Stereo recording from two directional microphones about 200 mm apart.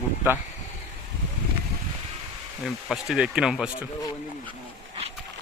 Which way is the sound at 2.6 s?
Centre (ahead or behind).